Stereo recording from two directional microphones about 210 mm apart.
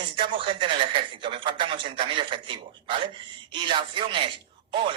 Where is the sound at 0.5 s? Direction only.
25° right (ahead or behind).